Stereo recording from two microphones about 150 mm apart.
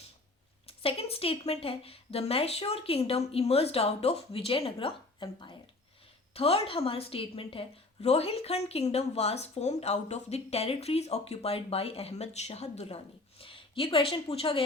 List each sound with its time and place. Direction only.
0.7 s a woman's voice: 40° left (ahead or behind)